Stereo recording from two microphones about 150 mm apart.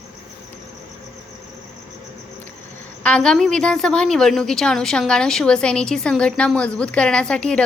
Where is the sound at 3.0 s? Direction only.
5° left (ahead or behind).